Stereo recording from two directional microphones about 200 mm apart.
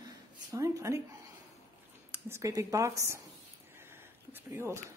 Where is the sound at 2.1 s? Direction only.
15° right (ahead or behind).